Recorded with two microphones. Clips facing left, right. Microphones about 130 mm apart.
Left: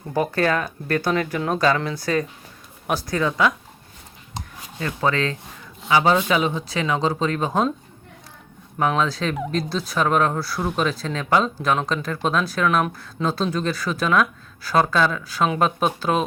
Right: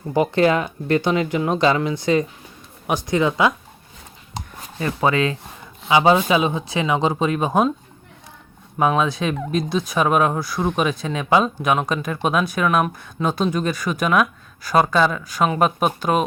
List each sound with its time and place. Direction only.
0.1 s speech: 15° right (ahead or behind)
4.9 s speech: 15° right (ahead or behind)
8.8 s speech: 15° right (ahead or behind)